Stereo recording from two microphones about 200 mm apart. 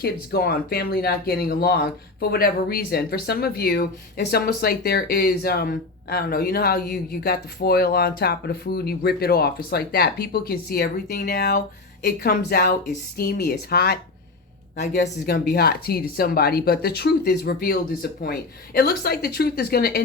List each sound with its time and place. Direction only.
0.0 s speech: 50° left (ahead or behind)
15.3 s speech: 50° left (ahead or behind)